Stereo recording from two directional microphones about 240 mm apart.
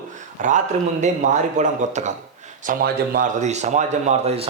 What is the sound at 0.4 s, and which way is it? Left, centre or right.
Speech, right.